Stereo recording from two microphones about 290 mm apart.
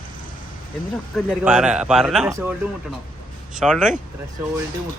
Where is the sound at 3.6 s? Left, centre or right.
Centre.